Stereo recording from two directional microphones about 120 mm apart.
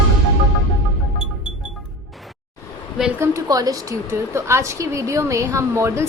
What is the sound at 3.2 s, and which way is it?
A woman's voice, 30° right (ahead or behind).